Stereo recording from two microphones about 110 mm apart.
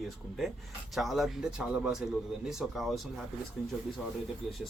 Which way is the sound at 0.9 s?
Centre (ahead or behind).